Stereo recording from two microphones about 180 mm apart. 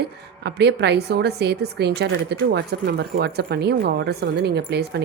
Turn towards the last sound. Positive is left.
turn(degrees=-65)  # may be behind; listen again after turning